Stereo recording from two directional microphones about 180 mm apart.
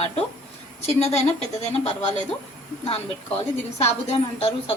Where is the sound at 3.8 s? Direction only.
35° left (ahead or behind).